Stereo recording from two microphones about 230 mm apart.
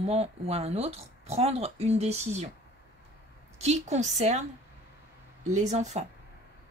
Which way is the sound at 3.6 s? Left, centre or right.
Right.